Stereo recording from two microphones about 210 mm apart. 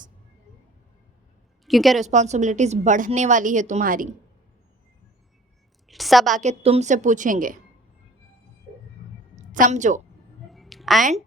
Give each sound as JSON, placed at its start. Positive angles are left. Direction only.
{"t": 1.6, "sound": "a woman's voice", "side_deg": 0}
{"t": 2.0, "sound": "a woman's voice", "side_deg": -35}
{"t": 5.9, "sound": "a woman's voice", "side_deg": 0}
{"t": 6.3, "sound": "a woman's voice", "side_deg": -35}
{"t": 9.3, "sound": "a woman's voice", "side_deg": -35}
{"t": 10.5, "sound": "a sound", "side_deg": 0}